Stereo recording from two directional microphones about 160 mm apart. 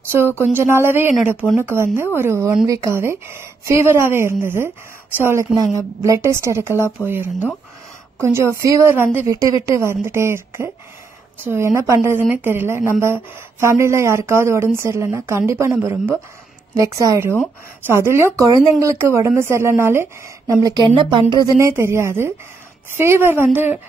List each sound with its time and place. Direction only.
0.4 s a woman's voice: 15° right (ahead or behind)
21.5 s speech: 15° right (ahead or behind)